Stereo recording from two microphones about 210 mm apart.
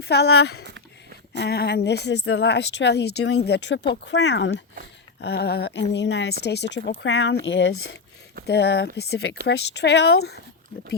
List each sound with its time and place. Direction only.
0.0 s speech: 50° left (ahead or behind)